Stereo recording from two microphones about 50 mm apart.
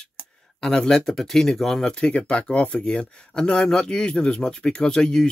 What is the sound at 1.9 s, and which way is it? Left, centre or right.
Speech, centre.